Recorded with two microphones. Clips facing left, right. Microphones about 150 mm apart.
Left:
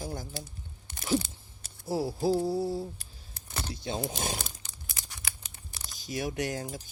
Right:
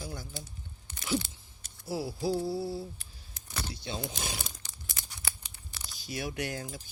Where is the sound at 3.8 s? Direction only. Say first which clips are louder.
Left 6 dB; 40° left (ahead or behind).